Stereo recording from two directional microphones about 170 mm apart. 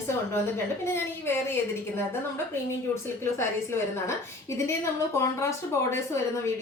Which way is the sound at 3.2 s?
15° left (ahead or behind).